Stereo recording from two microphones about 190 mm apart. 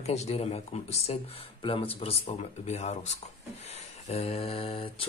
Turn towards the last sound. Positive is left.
turn(degrees=30)  # may be behind; listen again after turning